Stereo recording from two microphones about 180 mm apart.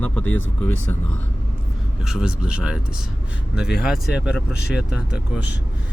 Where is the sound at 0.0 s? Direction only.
10° left (ahead or behind).